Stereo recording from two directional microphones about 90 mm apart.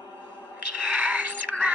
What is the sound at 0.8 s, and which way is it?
Music, 15° right (ahead or behind).